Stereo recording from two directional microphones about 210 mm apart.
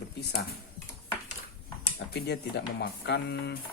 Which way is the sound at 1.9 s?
55° left (ahead or behind).